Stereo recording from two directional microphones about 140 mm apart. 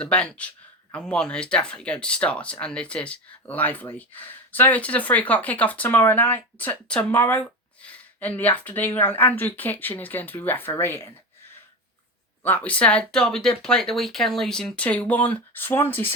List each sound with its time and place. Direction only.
0.0 s speech: 10° left (ahead or behind)
12.4 s speech: 10° left (ahead or behind)